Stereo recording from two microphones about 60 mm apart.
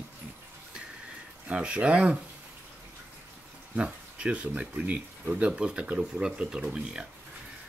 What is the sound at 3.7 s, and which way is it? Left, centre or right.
Speech, centre.